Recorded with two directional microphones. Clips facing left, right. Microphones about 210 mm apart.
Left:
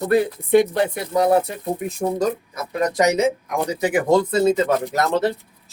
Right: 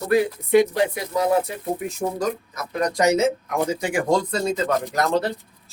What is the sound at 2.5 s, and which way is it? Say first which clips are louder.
Speech: left 3 dB; 20° left (ahead or behind).